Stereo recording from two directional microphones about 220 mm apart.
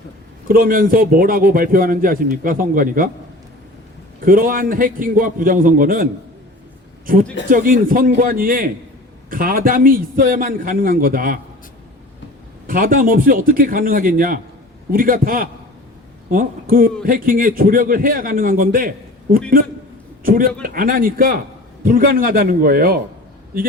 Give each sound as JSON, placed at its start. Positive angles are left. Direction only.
{"t": 0.4, "sound": "a man's voice", "side_deg": -40}
{"t": 4.3, "sound": "a man's voice", "side_deg": -40}
{"t": 7.5, "sound": "a man's voice", "side_deg": -40}
{"t": 12.6, "sound": "a man's voice", "side_deg": -40}